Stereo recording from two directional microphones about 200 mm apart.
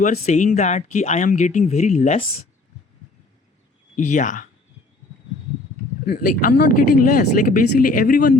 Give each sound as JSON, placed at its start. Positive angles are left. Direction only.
{"t": 0.0, "sound": "speech", "side_deg": 35}
{"t": 3.9, "sound": "speech", "side_deg": 40}
{"t": 6.1, "sound": "speech", "side_deg": 45}